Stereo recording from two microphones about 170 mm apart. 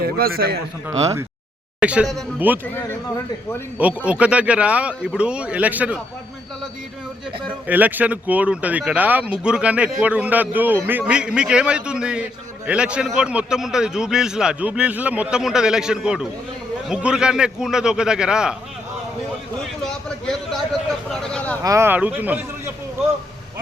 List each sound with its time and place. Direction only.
0.0 s a man's voice: 60° right (ahead or behind)
1.8 s speech: 5° right (ahead or behind)
3.8 s speech: 10° right (ahead or behind)
7.7 s a man's voice: 10° right (ahead or behind)
19.8 s a man's voice: centre (ahead or behind)
21.6 s speech: 15° right (ahead or behind)